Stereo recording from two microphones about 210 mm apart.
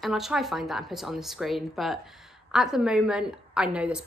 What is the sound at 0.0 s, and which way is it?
A woman's voice, centre (ahead or behind).